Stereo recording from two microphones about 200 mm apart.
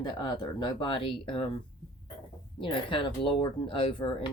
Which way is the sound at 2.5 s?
25° left (ahead or behind).